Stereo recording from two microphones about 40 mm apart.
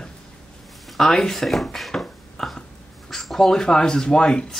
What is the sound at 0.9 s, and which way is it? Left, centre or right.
Speech, centre.